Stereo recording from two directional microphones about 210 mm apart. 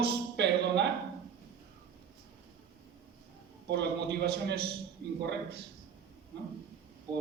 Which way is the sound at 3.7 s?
50° right (ahead or behind).